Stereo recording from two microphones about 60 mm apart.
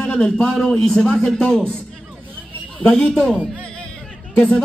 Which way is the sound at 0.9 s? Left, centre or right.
Centre.